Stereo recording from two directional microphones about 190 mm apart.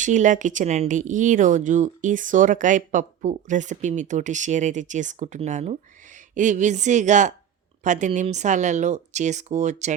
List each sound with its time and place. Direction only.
0.0 s speech: 40° right (ahead or behind)